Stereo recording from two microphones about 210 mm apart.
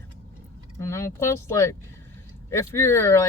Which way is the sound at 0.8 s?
15° left (ahead or behind).